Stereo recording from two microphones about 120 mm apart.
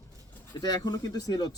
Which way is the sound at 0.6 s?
35° left (ahead or behind).